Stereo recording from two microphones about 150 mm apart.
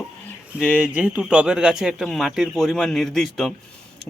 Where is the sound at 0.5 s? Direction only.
10° right (ahead or behind).